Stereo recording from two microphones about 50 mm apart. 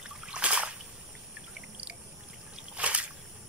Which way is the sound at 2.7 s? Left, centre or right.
Right.